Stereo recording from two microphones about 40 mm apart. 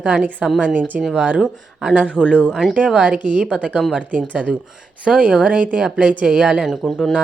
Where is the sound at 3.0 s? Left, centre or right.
Right.